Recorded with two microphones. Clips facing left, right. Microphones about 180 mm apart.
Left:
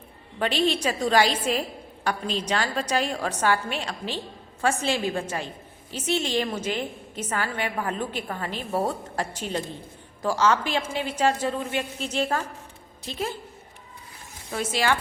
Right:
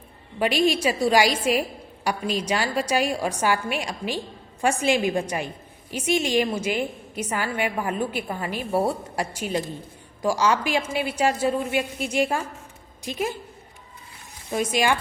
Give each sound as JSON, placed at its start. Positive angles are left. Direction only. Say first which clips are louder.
{"t": 0.3, "sound": "a woman's voice", "louder": "right 3 dB", "side_deg": -10}
{"t": 14.5, "sound": "a woman's voice", "louder": "right 3 dB", "side_deg": -15}